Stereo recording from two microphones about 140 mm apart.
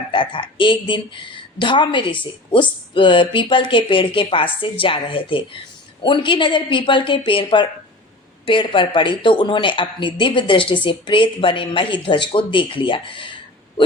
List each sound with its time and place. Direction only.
0.1 s speech: 35° left (ahead or behind)